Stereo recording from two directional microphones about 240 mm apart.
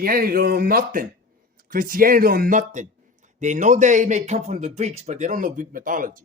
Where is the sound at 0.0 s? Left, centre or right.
Right.